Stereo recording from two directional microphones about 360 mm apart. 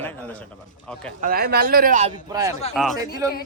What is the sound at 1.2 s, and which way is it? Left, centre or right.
Speech, right.